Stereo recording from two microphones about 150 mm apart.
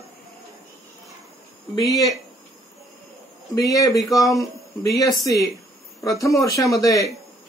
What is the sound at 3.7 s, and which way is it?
Speech, 20° left (ahead or behind).